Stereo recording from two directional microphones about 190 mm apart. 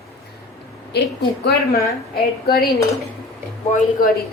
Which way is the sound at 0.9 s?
60° left (ahead or behind).